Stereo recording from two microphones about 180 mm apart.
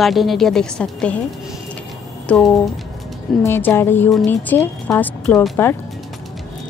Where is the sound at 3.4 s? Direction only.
10° left (ahead or behind).